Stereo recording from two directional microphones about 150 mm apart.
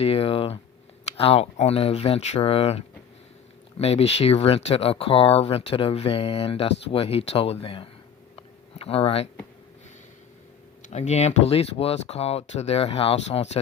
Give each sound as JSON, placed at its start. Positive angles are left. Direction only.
{"t": 0.0, "sound": "speech", "side_deg": 40}
{"t": 8.4, "sound": "a sound", "side_deg": 40}
{"t": 10.8, "sound": "speech", "side_deg": 50}